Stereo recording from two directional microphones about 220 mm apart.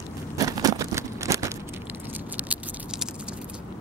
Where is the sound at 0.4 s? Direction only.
15° right (ahead or behind).